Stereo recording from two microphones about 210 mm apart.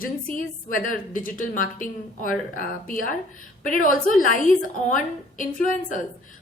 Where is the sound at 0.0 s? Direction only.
40° left (ahead or behind).